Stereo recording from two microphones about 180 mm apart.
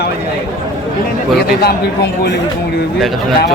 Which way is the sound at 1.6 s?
60° left (ahead or behind).